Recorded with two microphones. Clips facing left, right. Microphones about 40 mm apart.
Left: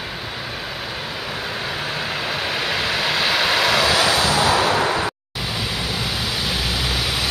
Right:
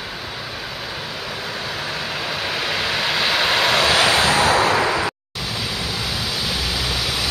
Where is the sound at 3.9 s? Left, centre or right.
Right.